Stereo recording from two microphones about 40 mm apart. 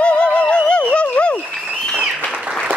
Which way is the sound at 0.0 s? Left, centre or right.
Left.